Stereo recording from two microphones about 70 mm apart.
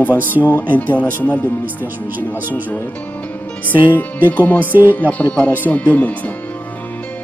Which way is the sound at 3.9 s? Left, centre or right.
Left.